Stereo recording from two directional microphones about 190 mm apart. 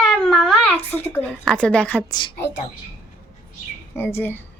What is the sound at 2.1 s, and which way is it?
Speech, 25° left (ahead or behind).